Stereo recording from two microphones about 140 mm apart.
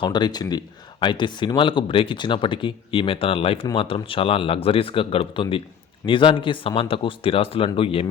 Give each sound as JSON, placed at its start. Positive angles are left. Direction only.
{"t": 0.0, "sound": "speech", "side_deg": 30}